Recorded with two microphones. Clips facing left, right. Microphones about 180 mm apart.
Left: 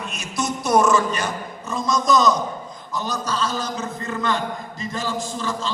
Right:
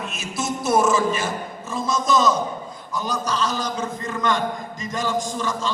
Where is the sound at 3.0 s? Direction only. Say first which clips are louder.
Right 1 dB; 10° right (ahead or behind).